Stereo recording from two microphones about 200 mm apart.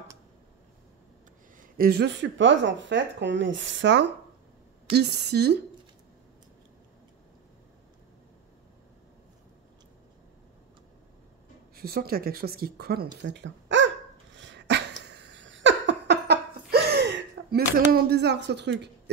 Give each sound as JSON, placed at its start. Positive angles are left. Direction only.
{"t": 1.6, "sound": "speech", "side_deg": -50}
{"t": 11.7, "sound": "speech", "side_deg": -50}
{"t": 13.2, "sound": "dog", "side_deg": -60}